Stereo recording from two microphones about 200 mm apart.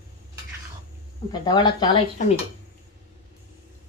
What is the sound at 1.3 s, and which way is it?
Speech, 20° left (ahead or behind).